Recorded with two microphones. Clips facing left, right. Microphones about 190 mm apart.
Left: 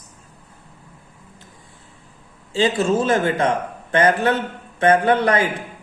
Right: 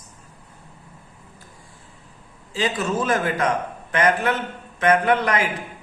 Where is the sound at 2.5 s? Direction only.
30° left (ahead or behind).